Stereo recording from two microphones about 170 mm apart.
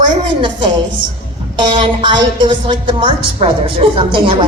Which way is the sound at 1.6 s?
30° right (ahead or behind).